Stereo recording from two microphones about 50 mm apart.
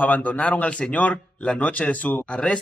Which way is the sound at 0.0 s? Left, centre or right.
Left.